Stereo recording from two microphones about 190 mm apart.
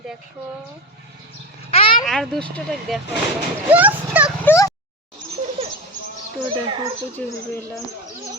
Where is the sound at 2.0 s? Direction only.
Centre (ahead or behind).